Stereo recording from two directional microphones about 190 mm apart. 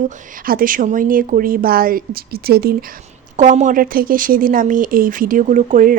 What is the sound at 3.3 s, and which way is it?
Speech, 40° right (ahead or behind).